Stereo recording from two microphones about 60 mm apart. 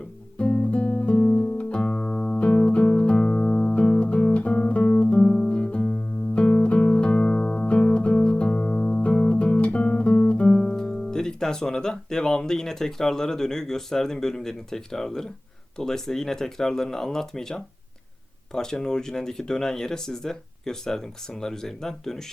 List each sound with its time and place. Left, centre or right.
0.3 s music: centre
10.5 s speech: centre